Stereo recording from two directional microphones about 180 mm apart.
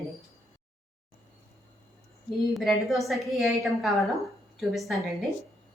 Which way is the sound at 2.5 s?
Centre (ahead or behind).